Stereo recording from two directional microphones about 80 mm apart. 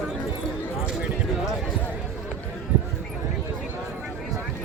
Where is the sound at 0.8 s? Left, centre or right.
Centre.